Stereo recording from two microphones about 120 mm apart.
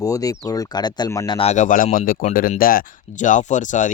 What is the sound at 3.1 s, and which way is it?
Speech, 90° left.